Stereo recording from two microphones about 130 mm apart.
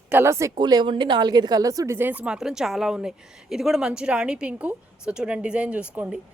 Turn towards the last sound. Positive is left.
turn(degrees=-10)  # may be behind; listen again after turning